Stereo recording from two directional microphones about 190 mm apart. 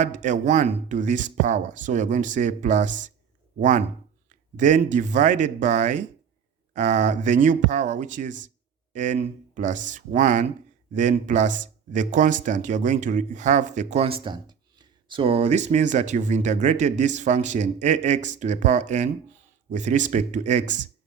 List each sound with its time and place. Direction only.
0.0 s speech: 40° right (ahead or behind)